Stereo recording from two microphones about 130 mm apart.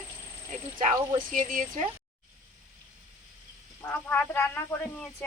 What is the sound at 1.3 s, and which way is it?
Speech, 90° right.